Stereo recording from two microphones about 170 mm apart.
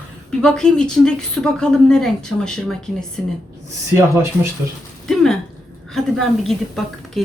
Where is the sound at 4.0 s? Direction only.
15° right (ahead or behind).